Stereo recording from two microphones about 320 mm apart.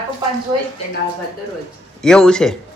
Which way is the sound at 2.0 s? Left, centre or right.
Centre.